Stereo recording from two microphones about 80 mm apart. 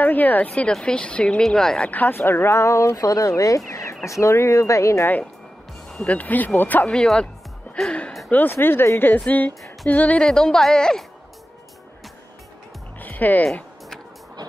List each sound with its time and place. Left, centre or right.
0.0 s speech: left
1.9 s speech: left
5.9 s speech: centre
8.3 s speech: left; by 11.1 s centre
13.0 s music: left